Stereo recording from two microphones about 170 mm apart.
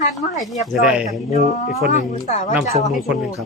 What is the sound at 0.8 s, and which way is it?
Speech, 5° right (ahead or behind).